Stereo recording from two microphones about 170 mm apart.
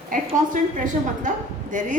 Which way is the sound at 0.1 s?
50° right (ahead or behind).